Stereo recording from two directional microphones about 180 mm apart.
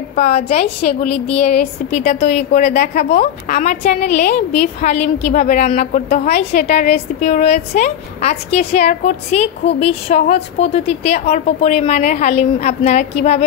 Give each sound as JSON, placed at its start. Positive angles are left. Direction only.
{"t": 0.1, "sound": "a woman's voice", "side_deg": 35}